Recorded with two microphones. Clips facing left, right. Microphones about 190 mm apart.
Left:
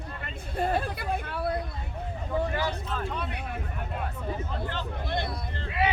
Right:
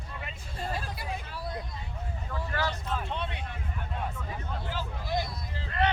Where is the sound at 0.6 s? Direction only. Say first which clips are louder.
Left 8 dB; 60° left (ahead or behind).